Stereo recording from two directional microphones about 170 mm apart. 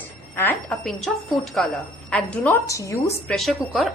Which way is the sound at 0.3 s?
10° left (ahead or behind).